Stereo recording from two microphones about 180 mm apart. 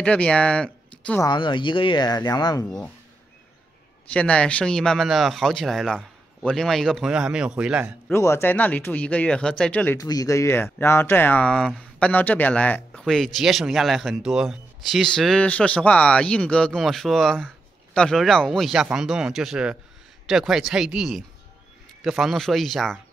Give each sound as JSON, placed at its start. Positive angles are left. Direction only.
{"t": 0.0, "sound": "speech", "side_deg": 5}
{"t": 1.2, "sound": "speech", "side_deg": 25}
{"t": 2.6, "sound": "speech", "side_deg": 10}
{"t": 4.1, "sound": "speech", "side_deg": 5}
{"t": 8.1, "sound": "speech", "side_deg": 15}
{"t": 9.9, "sound": "speech", "side_deg": 20}